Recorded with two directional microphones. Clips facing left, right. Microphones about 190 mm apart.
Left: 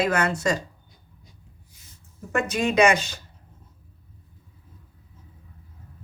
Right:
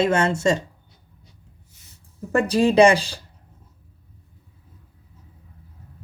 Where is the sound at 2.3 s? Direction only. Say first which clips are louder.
Right 6 dB; 35° right (ahead or behind).